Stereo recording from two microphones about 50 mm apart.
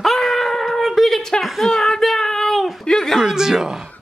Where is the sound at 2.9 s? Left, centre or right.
Centre.